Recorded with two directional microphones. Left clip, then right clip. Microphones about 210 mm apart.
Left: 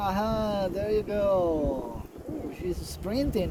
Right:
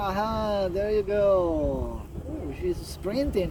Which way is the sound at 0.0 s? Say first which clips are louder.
Right 1 dB; 60° left (ahead or behind).